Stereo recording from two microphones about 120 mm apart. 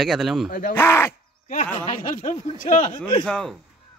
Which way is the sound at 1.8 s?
50° left (ahead or behind).